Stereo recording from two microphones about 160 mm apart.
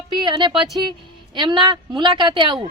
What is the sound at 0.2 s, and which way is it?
A woman's voice, 30° right (ahead or behind).